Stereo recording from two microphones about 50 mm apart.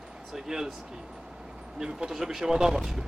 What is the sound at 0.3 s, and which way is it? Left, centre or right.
Speech, centre.